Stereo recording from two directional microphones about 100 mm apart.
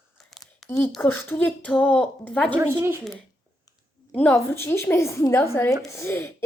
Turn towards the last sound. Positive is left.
turn(degrees=25)  # may be behind; listen again after turning